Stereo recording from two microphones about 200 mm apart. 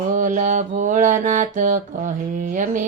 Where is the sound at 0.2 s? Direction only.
40° right (ahead or behind).